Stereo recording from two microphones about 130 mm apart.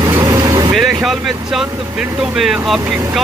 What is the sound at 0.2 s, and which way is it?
Vehicle, 25° right (ahead or behind).